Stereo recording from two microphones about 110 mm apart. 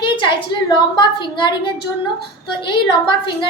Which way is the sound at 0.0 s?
50° left (ahead or behind).